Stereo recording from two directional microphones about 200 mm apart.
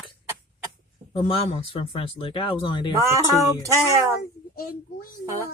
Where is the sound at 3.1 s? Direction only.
15° right (ahead or behind).